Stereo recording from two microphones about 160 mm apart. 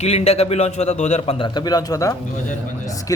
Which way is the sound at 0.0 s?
40° left (ahead or behind).